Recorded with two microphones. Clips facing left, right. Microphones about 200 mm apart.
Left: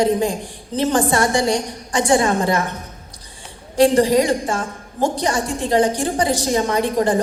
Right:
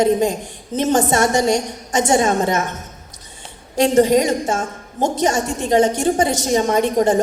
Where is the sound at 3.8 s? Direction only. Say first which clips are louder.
Even; 20° right (ahead or behind).